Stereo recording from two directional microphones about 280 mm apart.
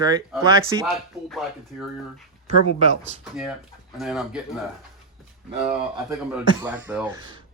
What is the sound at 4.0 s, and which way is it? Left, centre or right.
Speech, centre.